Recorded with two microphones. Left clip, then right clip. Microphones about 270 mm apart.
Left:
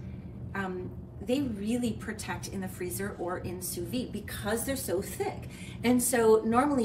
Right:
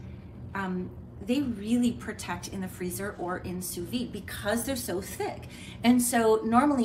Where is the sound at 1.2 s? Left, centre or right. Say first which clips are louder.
Right 1 dB; centre.